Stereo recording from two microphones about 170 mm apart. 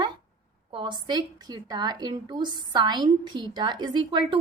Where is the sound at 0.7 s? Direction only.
30° right (ahead or behind).